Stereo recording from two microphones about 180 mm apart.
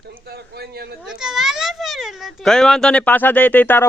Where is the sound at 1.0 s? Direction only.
Centre (ahead or behind).